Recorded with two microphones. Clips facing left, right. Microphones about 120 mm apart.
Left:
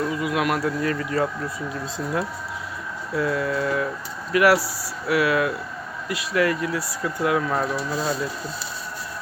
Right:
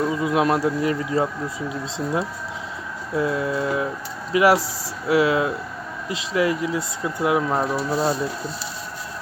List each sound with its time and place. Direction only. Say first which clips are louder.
0.1 s speech: right 3 dB; 25° right (ahead or behind)
7.9 s speech: right 4 dB; 35° right (ahead or behind)